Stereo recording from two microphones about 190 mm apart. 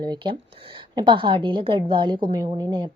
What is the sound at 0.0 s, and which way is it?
A woman's voice, 20° right (ahead or behind).